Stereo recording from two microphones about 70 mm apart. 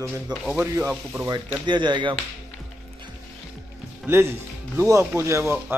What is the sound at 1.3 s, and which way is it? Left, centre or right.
Speech, right.